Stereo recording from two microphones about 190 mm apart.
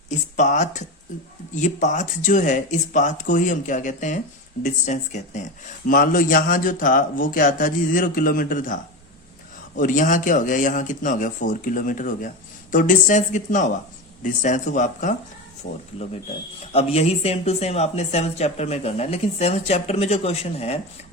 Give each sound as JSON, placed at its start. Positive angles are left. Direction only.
{"t": 0.1, "sound": "a man's voice", "side_deg": 40}
{"t": 9.8, "sound": "a man's voice", "side_deg": 45}
{"t": 16.7, "sound": "speech", "side_deg": 30}